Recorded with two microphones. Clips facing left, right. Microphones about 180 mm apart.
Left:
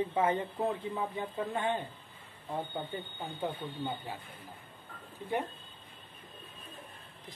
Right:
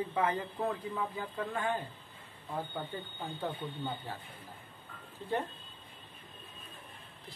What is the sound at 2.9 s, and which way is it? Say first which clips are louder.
Speech: left 1 dB; 20° left (ahead or behind).